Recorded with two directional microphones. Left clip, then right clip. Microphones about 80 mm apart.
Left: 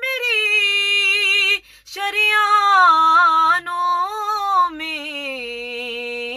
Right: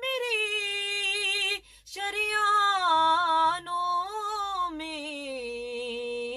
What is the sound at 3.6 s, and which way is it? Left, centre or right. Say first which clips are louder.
Music: left 9 dB; left.